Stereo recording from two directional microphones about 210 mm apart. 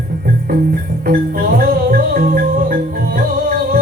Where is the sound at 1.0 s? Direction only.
45° right (ahead or behind).